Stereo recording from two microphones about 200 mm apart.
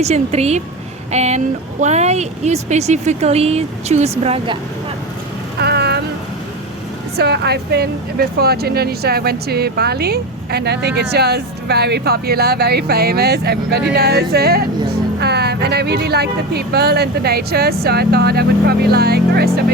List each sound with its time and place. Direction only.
0.0 s speech: 30° right (ahead or behind)
5.5 s vehicle: 55° right (ahead or behind)
7.2 s speech: 55° right (ahead or behind)